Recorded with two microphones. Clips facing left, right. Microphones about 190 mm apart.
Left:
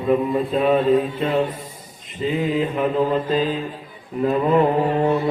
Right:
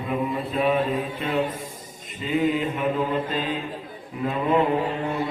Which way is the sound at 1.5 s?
45° right (ahead or behind).